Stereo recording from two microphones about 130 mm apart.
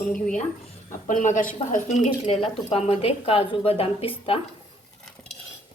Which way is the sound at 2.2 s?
50° left (ahead or behind).